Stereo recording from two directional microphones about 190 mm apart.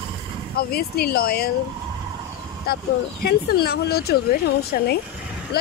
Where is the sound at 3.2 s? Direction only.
55° left (ahead or behind).